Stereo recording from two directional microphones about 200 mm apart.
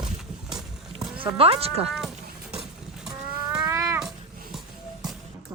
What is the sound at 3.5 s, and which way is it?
Cat, 5° right (ahead or behind).